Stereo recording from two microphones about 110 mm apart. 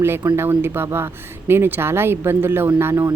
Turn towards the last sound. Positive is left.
turn(degrees=-20)  # may be behind; listen again after turning